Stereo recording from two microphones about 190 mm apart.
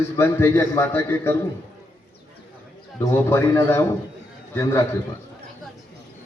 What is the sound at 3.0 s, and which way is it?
A man's voice, 10° left (ahead or behind).